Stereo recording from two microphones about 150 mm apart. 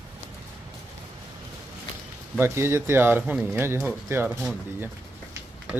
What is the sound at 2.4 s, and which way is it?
Speech, 15° right (ahead or behind).